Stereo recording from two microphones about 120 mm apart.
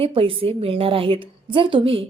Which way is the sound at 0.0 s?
50° right (ahead or behind).